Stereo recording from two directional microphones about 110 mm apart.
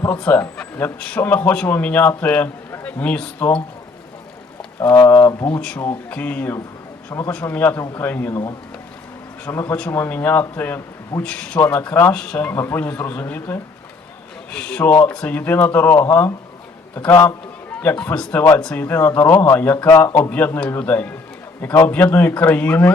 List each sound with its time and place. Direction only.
0.2 s speech: 10° left (ahead or behind)
4.9 s a man's voice: 20° left (ahead or behind)
5.5 s speech: 10° left (ahead or behind)
8.3 s speech: 35° left (ahead or behind)
9.5 s a man's voice: 20° left (ahead or behind)
12.5 s a man's voice: 20° left (ahead or behind)
20.3 s speech: 15° left (ahead or behind)